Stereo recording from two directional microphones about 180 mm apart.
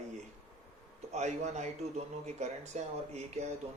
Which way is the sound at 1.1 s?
40° right (ahead or behind).